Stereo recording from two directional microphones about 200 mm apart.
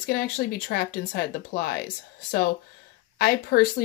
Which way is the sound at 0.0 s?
50° left (ahead or behind).